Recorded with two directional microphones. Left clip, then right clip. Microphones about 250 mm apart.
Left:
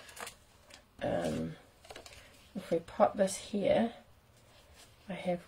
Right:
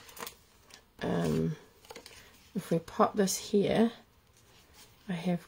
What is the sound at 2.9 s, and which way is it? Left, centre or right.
Speech, right.